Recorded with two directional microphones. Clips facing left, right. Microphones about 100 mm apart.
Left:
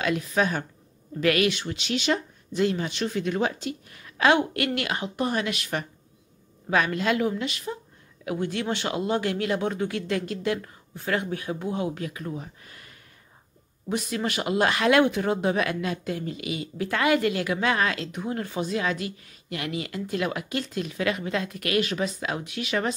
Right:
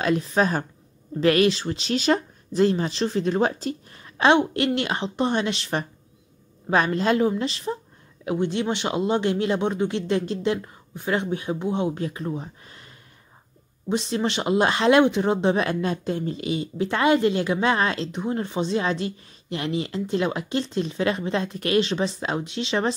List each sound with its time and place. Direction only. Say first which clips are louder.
0.0 s speech: right 3 dB; 35° right (ahead or behind)